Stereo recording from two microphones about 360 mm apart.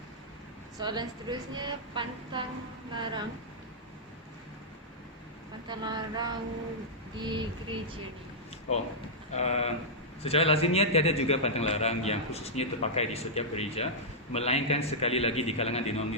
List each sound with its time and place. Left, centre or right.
0.8 s a woman's voice: centre
5.6 s a woman's voice: centre
9.3 s a man's voice: centre